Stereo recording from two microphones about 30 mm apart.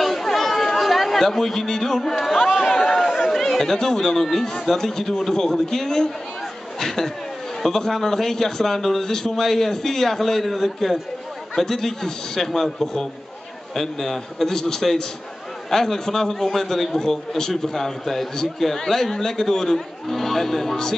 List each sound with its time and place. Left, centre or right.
0.0 s chatter: centre
2.9 s speech: centre
6.8 s a sound: centre
7.6 s speech: centre